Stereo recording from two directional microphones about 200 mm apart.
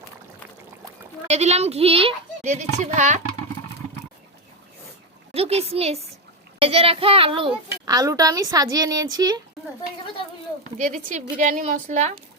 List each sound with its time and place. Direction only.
1.3 s a child's voice: 35° right (ahead or behind)
5.3 s a child's voice: 30° right (ahead or behind)
10.6 s a child's voice: 35° right (ahead or behind)